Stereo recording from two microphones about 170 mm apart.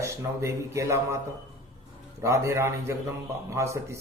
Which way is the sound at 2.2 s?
15° right (ahead or behind).